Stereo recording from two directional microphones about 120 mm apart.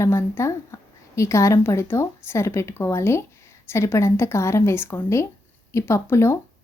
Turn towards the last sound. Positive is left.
turn(degrees=20)  # may be behind; listen again after turning